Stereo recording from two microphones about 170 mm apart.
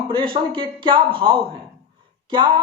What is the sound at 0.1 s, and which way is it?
Speech, 30° right (ahead or behind).